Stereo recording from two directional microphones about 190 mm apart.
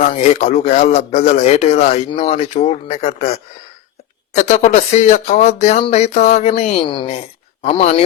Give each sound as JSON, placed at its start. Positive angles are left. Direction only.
{"t": 0.0, "sound": "speech", "side_deg": 40}